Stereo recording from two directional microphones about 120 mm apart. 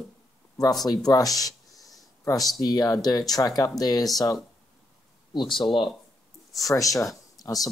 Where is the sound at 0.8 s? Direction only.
30° left (ahead or behind).